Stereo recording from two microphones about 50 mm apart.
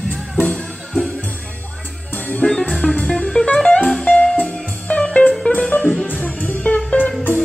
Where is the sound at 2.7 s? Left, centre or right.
Centre.